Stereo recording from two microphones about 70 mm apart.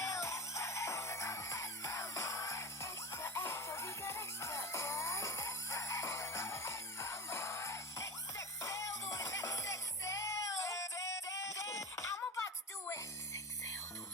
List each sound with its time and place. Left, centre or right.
0.0 s music: left